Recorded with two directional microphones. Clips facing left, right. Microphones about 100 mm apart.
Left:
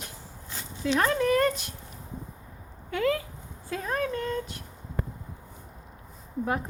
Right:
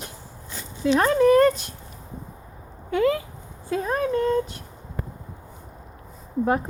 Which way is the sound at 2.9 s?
20° right (ahead or behind).